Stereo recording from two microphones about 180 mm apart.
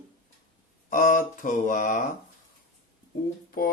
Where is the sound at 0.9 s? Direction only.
45° left (ahead or behind).